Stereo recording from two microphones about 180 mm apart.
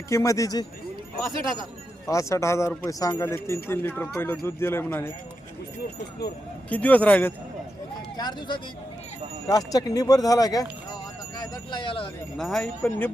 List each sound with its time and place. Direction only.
0.1 s speech: 15° left (ahead or behind)
2.0 s speech: 15° left (ahead or behind)
6.7 s speech: 10° left (ahead or behind)
8.1 s speech: 25° left (ahead or behind)
11.3 s a sound: 25° left (ahead or behind)
12.4 s speech: 5° left (ahead or behind)